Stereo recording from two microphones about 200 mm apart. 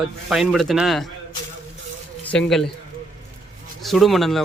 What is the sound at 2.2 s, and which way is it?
Speech, 5° left (ahead or behind).